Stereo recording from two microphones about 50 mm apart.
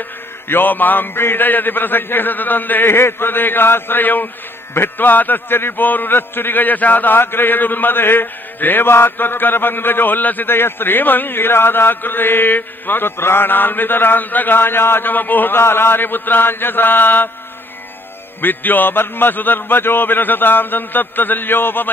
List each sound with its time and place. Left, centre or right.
0.5 s a man's voice: left
15.6 s a man's voice: left
18.4 s a man's voice: left